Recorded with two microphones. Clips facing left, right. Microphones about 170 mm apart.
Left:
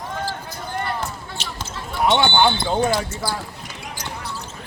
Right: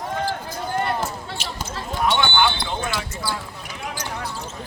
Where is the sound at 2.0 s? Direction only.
25° left (ahead or behind).